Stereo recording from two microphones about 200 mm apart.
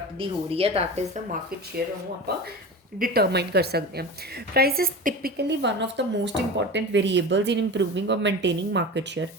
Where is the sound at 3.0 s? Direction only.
50° right (ahead or behind).